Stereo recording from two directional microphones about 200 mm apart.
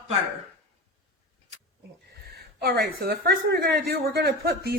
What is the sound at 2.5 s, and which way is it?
A woman's voice, 50° right (ahead or behind).